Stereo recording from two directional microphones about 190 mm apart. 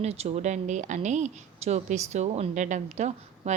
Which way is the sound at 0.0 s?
35° right (ahead or behind).